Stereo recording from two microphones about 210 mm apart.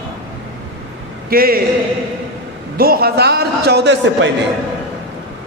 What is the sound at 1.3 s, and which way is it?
Speech, 45° right (ahead or behind).